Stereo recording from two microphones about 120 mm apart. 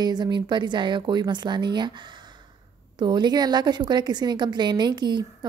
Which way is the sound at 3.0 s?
40° right (ahead or behind).